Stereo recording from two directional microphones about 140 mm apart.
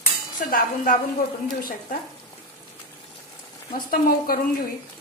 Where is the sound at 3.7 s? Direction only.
90° left.